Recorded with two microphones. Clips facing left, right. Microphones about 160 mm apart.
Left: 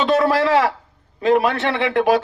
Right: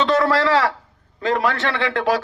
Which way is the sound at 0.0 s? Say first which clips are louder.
Left 1 dB; 20° left (ahead or behind).